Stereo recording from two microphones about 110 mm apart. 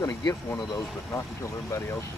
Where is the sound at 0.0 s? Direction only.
35° left (ahead or behind).